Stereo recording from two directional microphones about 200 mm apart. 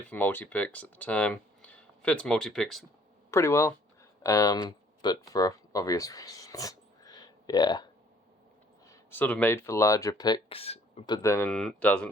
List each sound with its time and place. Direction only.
0.1 s speech: 10° left (ahead or behind)
3.3 s speech: 15° left (ahead or behind)
8.9 s speech: 10° left (ahead or behind)